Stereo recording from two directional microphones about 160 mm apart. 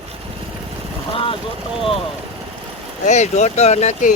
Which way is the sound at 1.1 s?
35° left (ahead or behind).